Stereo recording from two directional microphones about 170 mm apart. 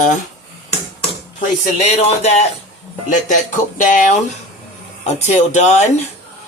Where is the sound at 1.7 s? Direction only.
40° left (ahead or behind).